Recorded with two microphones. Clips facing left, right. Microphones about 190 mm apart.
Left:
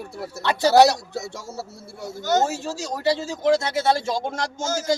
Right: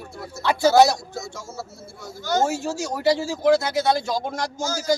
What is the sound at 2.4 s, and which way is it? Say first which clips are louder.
Speech: right 2 dB; 15° right (ahead or behind).